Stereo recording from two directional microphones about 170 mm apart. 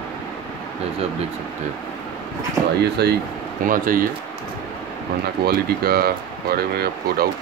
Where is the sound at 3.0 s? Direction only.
75° right (ahead or behind).